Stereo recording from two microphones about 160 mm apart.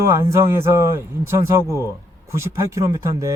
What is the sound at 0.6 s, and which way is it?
A man's voice, 15° right (ahead or behind).